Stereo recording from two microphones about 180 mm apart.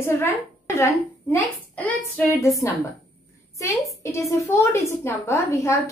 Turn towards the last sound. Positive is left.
turn(degrees=15)  # may be behind; listen again after turning